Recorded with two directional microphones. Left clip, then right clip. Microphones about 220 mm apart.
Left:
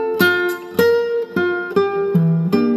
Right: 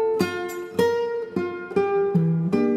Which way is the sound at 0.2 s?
45° left (ahead or behind).